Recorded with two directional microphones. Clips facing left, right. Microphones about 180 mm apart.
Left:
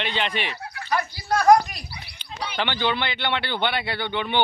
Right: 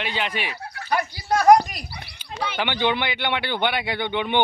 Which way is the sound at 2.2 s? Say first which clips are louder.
Right 2 dB; 10° right (ahead or behind).